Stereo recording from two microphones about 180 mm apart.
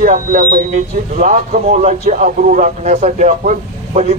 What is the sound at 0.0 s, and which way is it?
Speech, 50° right (ahead or behind).